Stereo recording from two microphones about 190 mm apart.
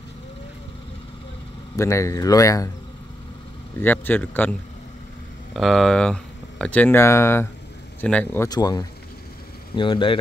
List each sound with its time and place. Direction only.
1.8 s speech: 15° left (ahead or behind)
3.8 s speech: 10° left (ahead or behind)
8.5 s speech: 20° left (ahead or behind)